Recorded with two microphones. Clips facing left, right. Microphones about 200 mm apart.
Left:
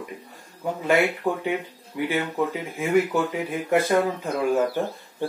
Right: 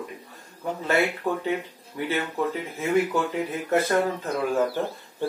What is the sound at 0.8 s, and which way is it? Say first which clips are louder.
Speech: left 3 dB; 15° left (ahead or behind).